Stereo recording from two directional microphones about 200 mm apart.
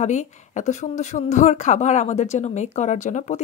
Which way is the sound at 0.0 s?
35° left (ahead or behind).